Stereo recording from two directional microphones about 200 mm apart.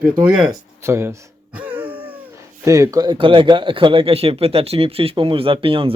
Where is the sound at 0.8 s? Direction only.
15° right (ahead or behind).